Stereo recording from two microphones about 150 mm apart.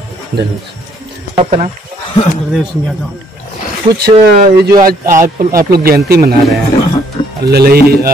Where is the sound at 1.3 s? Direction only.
45° right (ahead or behind).